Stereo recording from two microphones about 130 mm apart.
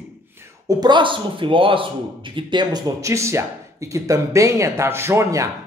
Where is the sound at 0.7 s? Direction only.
35° right (ahead or behind).